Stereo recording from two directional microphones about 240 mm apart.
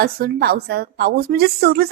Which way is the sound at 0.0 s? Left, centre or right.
Right.